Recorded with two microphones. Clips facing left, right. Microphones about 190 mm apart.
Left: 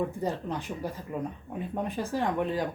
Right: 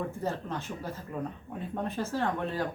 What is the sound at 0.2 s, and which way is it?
Speech, 15° left (ahead or behind).